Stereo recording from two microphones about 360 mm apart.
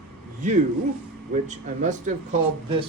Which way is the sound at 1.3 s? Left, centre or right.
Right.